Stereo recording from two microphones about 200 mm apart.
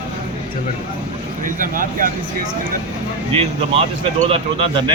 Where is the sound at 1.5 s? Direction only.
45° right (ahead or behind).